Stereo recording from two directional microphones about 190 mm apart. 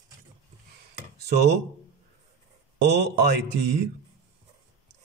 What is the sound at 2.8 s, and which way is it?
Speech, 60° right (ahead or behind).